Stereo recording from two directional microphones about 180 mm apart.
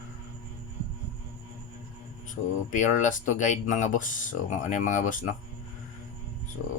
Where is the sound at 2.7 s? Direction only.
45° left (ahead or behind).